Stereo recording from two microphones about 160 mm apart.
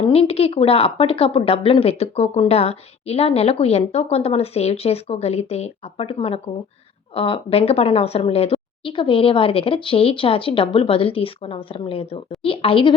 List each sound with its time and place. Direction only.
0.0 s a woman's voice: 35° left (ahead or behind)